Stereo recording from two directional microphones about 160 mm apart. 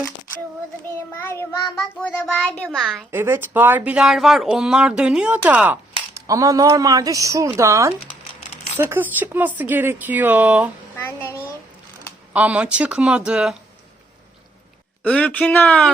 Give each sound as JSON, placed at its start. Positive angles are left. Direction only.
{"t": 0.9, "sound": "a child's voice", "side_deg": 15}
{"t": 3.1, "sound": "speech", "side_deg": -15}
{"t": 6.1, "sound": "speech", "side_deg": -20}
{"t": 10.9, "sound": "a child's voice", "side_deg": 10}
{"t": 12.3, "sound": "speech", "side_deg": -10}
{"t": 15.0, "sound": "a child's voice", "side_deg": 10}